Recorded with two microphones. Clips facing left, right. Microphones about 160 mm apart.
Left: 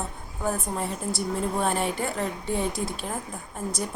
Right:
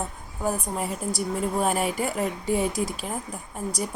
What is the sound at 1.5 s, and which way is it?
A woman's voice, 5° right (ahead or behind).